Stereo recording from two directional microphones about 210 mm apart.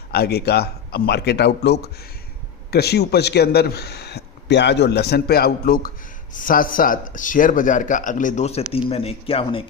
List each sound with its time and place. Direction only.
0.1 s a man's voice: 50° left (ahead or behind); by 9.6 s 25° left (ahead or behind)